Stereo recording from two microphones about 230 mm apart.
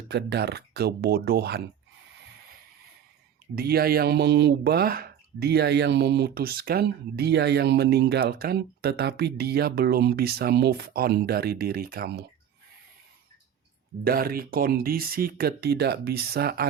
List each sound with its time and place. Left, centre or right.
0.1 s speech: right
3.5 s speech: right
14.0 s speech: right